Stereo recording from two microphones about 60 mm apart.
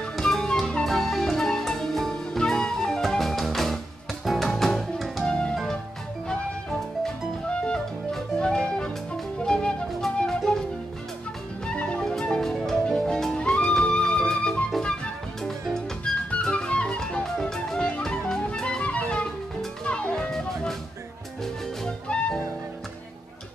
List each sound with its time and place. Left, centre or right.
0.2 s music: centre
5.2 s music: centre
7.4 s music: centre
11.6 s music: centre
21.8 s music: centre